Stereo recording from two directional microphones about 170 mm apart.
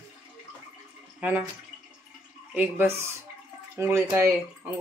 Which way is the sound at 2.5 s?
10° right (ahead or behind).